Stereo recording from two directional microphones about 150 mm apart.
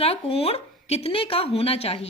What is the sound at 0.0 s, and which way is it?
Speech, 40° left (ahead or behind).